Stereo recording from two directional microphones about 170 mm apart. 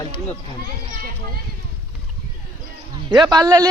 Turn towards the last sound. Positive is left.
turn(degrees=-20)  # may be behind; listen again after turning